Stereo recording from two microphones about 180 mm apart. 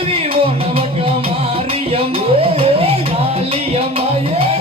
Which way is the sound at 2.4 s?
30° right (ahead or behind).